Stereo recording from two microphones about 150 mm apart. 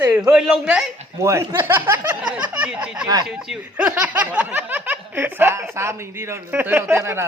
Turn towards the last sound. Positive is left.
turn(degrees=-15)  # may be behind; listen again after turning